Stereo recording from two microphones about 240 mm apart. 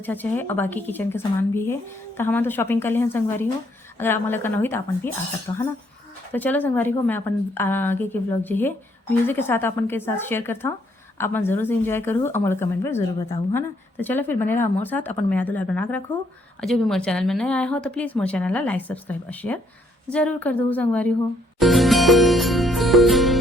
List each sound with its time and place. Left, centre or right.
0.0 s speech: centre
21.6 s music: centre